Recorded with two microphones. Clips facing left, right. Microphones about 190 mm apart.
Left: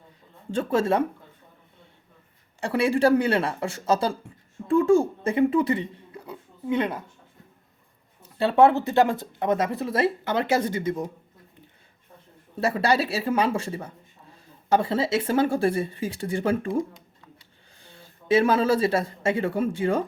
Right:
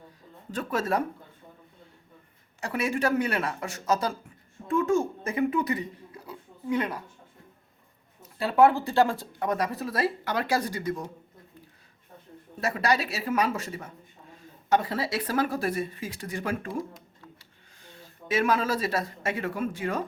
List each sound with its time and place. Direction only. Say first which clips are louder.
0.5 s speech: left 5 dB; 25° left (ahead or behind)
2.6 s speech: left 6 dB; 30° left (ahead or behind)
6.2 s a sound: left 3 dB; 25° left (ahead or behind)
8.4 s speech: left 3 dB; 25° left (ahead or behind)
12.5 s speech: left 4 dB; 30° left (ahead or behind)
17.8 s speech: left 9 dB; 30° left (ahead or behind)